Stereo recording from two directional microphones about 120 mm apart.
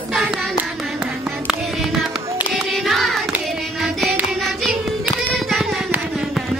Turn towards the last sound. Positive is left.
turn(degrees=0)  # may be behind; listen again after turning